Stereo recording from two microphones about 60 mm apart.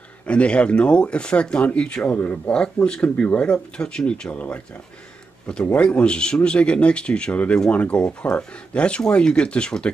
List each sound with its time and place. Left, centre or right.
0.3 s speech: centre
2.1 s speech: left
2.5 s speech: centre
5.9 s speech: centre